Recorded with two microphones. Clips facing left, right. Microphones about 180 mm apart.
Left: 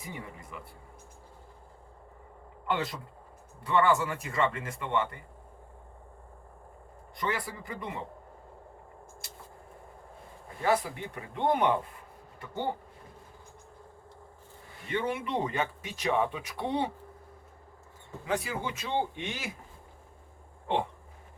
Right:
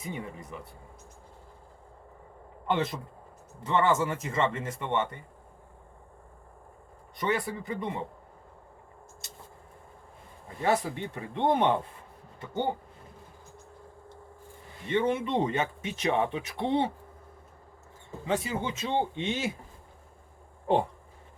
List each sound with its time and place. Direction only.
0.0 s speech: 20° right (ahead or behind)
2.6 s speech: 20° right (ahead or behind)
7.2 s speech: 20° right (ahead or behind)
10.6 s speech: 25° right (ahead or behind)
14.8 s speech: 25° right (ahead or behind)
18.3 s speech: 25° right (ahead or behind)